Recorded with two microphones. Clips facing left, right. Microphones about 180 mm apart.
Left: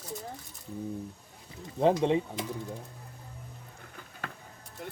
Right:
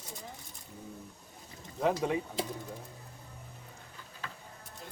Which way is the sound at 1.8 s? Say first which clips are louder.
Left 5 dB; 25° left (ahead or behind).